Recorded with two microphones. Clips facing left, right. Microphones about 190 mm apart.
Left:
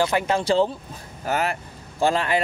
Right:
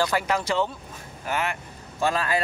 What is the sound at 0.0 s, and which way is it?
Speech, 25° left (ahead or behind).